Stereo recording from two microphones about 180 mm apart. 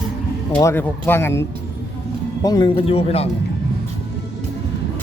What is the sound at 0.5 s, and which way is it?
Speech, 15° left (ahead or behind).